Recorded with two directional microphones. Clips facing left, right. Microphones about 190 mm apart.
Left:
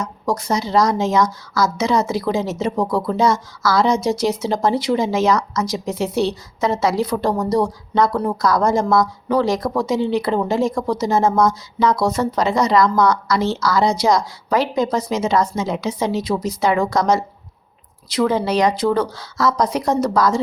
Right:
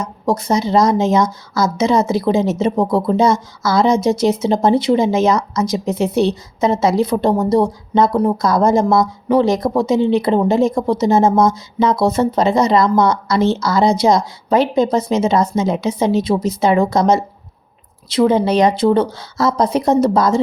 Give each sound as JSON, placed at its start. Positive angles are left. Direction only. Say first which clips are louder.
{"t": 0.0, "sound": "a woman's voice", "louder": "right 3 dB", "side_deg": -25}